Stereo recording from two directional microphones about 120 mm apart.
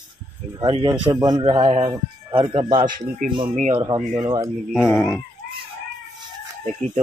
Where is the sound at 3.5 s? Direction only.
90° right.